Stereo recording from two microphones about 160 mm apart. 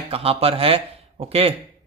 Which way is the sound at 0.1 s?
35° right (ahead or behind).